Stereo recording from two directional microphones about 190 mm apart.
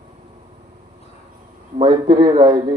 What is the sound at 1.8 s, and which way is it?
Speech, 25° right (ahead or behind).